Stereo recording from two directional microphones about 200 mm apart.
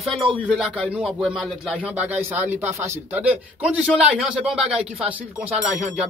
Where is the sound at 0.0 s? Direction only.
Centre (ahead or behind).